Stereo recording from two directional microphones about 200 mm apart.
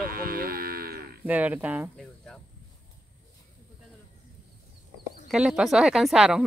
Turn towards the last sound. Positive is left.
turn(degrees=-5)  # may be behind; listen again after turning